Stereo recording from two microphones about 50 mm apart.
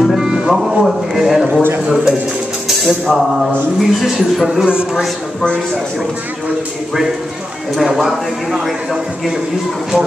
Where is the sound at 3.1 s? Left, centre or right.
Centre.